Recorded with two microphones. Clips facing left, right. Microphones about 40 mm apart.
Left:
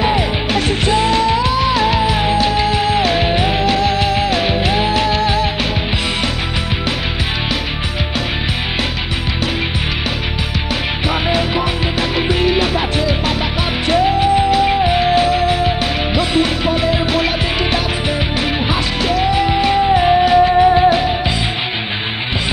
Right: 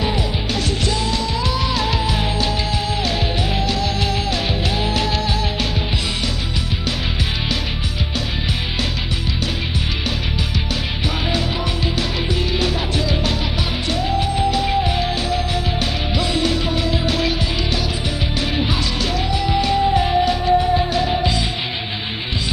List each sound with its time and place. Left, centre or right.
0.0 s music: left
11.1 s music: left
18.6 s music: left